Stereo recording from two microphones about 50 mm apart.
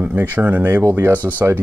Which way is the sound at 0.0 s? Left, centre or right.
Right.